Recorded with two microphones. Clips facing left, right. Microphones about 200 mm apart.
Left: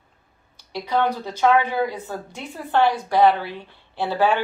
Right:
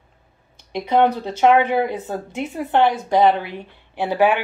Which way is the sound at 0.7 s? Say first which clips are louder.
Right 5 dB; 20° right (ahead or behind).